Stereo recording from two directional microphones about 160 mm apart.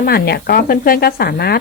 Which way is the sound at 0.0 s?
75° left (ahead or behind).